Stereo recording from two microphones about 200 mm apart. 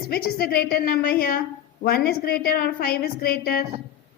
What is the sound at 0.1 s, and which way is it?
A woman's voice, 50° left (ahead or behind).